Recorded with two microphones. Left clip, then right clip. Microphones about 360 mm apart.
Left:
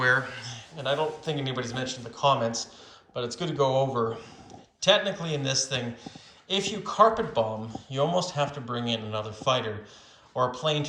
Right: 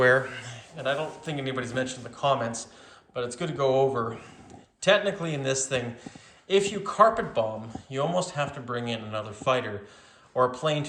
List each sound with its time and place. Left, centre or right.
0.0 s a man's voice: centre